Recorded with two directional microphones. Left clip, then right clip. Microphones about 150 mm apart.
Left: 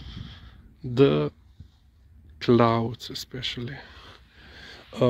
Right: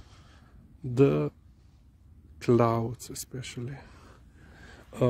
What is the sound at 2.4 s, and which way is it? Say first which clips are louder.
Speech: left 4 dB; 5° right (ahead or behind).